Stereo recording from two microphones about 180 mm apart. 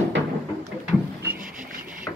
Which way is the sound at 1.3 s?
50° right (ahead or behind).